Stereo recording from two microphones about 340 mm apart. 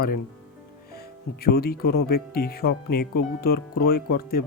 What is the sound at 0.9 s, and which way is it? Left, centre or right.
Speech, left.